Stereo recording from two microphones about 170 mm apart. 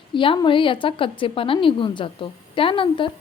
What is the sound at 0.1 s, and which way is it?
A woman's voice, 30° left (ahead or behind).